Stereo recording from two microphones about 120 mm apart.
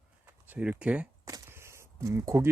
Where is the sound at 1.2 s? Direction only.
25° right (ahead or behind).